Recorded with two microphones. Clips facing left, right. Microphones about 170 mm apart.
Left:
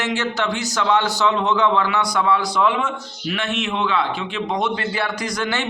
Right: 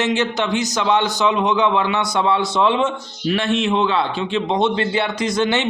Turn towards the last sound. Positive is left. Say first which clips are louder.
# right 5 dB
turn(degrees=-20)  # may be behind; listen again after turning